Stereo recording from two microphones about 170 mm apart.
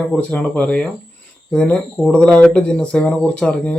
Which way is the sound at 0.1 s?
5° left (ahead or behind).